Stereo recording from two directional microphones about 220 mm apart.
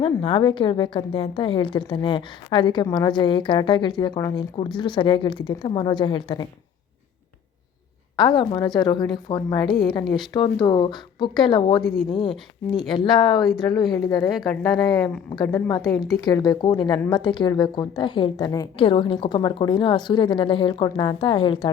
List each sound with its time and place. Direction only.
0.0 s a woman's voice: 25° left (ahead or behind)
8.1 s a woman's voice: 20° left (ahead or behind)
9.6 s speech: centre (ahead or behind)
9.9 s a woman's voice: 20° left (ahead or behind)
11.8 s speech: centre (ahead or behind)
12.9 s a woman's voice: 20° left (ahead or behind)